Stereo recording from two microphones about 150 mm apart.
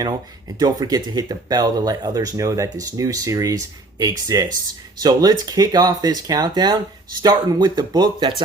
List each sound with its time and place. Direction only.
0.6 s speech: 25° right (ahead or behind)